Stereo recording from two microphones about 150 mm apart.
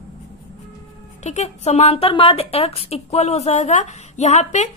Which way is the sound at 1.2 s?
50° left (ahead or behind).